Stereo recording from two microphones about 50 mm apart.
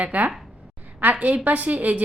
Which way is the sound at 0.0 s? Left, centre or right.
Right.